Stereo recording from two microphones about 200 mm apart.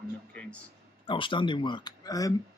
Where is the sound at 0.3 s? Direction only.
5° left (ahead or behind).